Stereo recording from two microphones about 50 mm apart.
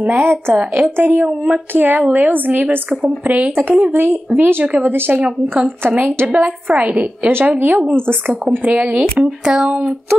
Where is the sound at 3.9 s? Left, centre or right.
Right.